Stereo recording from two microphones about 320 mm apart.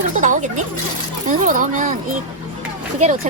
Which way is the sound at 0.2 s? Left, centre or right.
Right.